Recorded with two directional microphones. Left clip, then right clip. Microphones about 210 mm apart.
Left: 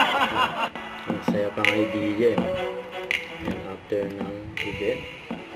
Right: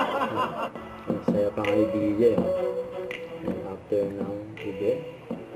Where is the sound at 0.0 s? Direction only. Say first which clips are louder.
Left 5 dB; 10° left (ahead or behind).